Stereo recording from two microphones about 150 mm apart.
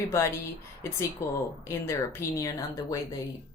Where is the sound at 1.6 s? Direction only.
15° left (ahead or behind).